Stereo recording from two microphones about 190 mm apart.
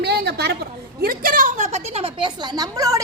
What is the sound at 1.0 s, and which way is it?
A woman's voice, 45° right (ahead or behind).